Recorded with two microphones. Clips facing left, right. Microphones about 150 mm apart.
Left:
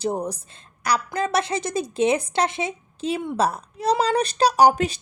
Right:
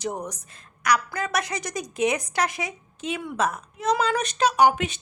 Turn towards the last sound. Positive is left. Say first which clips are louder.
# left 3 dB
turn(degrees=35)  # may be behind; listen again after turning